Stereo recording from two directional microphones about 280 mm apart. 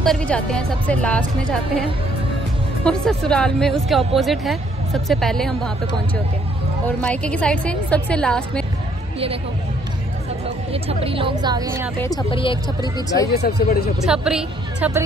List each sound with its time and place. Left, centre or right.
0.0 s a woman's voice: centre
7.0 s a woman's voice: centre
10.7 s speech: right
12.0 s speech: centre
13.3 s speech: left
14.0 s a woman's voice: centre